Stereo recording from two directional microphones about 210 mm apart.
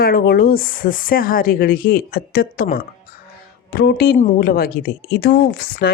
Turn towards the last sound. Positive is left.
turn(degrees=45)  # may be behind; listen again after turning